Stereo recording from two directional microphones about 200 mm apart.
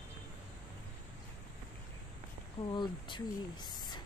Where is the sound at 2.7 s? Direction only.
25° left (ahead or behind).